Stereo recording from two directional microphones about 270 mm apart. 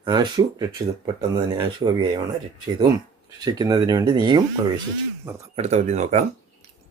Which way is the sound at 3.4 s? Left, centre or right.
Centre.